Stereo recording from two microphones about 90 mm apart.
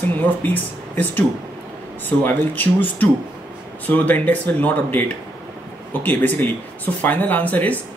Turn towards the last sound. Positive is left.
turn(degrees=15)  # may be behind; listen again after turning